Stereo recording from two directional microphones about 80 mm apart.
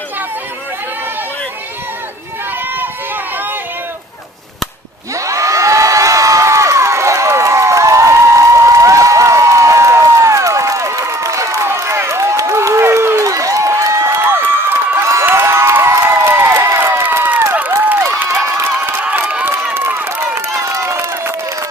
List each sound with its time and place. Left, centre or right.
5.2 s crowd: right
13.2 s a sound: right
16.1 s crowd: right
19.5 s run: right